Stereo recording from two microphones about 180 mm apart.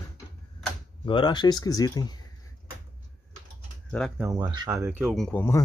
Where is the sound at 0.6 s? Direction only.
Centre (ahead or behind).